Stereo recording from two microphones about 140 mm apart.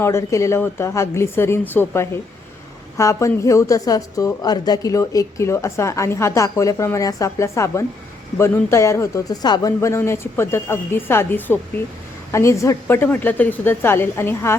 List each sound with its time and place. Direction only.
0.0 s a woman's voice: 20° left (ahead or behind)